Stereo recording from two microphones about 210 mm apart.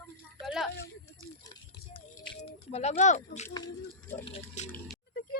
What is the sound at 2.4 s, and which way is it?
Speech, 30° left (ahead or behind).